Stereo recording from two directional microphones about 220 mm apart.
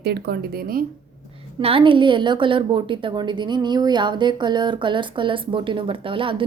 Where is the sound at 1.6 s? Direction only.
25° right (ahead or behind).